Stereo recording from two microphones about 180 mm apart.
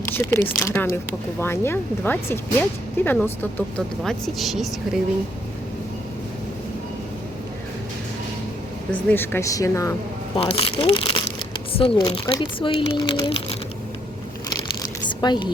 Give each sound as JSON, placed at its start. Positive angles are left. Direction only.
{"t": 0.1, "sound": "speech", "side_deg": 15}
{"t": 8.9, "sound": "speech", "side_deg": 10}
{"t": 10.3, "sound": "speech", "side_deg": 30}
{"t": 14.8, "sound": "a sound", "side_deg": 25}